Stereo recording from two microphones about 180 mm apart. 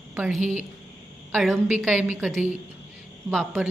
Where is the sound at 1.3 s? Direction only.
Centre (ahead or behind).